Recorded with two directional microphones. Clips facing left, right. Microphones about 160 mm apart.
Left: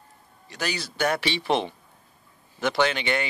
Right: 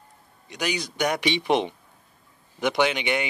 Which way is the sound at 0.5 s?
15° right (ahead or behind).